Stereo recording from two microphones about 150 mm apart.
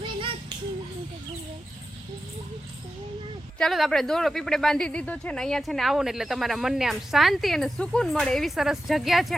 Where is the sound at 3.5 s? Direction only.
Centre (ahead or behind).